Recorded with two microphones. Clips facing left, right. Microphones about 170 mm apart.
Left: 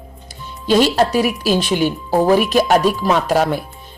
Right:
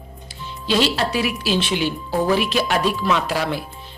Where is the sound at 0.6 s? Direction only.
45° left (ahead or behind).